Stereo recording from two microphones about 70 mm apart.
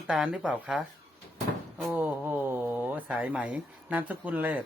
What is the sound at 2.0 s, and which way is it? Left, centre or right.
Speech, right.